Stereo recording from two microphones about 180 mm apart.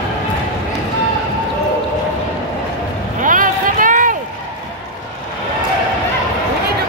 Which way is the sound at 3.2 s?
50° right (ahead or behind).